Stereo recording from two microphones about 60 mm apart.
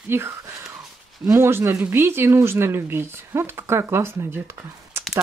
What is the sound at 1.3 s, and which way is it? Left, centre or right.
Speech, right.